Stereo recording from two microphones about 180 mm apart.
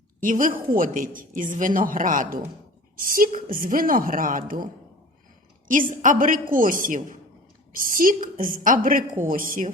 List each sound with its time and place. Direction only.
0.2 s a woman's voice: 50° right (ahead or behind)